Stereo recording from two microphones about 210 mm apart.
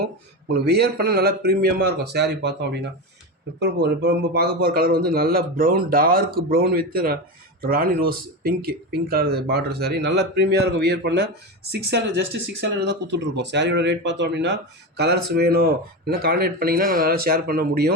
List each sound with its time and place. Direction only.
0.5 s speech: 50° right (ahead or behind)